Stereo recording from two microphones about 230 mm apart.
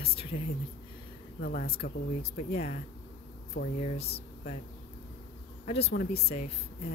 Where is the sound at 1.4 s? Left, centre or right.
Left.